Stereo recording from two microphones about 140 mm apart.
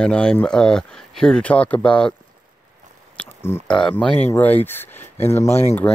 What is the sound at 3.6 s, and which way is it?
Speech, 5° left (ahead or behind).